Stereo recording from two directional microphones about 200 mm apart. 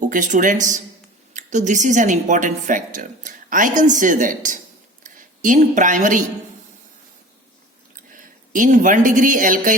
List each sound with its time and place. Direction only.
0.1 s a woman's voice: 40° right (ahead or behind)
7.9 s a woman's voice: 40° right (ahead or behind)